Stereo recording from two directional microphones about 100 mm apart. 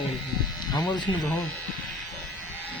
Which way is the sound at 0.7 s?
40° left (ahead or behind).